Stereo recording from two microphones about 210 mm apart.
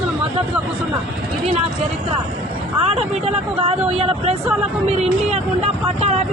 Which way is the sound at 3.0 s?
30° right (ahead or behind).